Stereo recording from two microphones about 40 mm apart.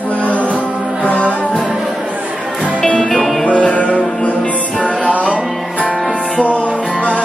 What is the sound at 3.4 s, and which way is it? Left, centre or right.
Music, left.